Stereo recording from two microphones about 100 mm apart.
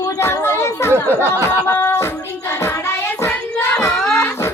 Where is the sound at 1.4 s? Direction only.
25° left (ahead or behind).